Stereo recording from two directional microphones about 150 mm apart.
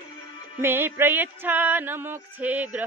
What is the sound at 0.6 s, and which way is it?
Music, 15° right (ahead or behind).